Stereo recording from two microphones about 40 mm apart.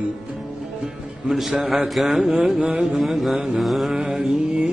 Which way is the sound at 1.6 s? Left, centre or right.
Centre.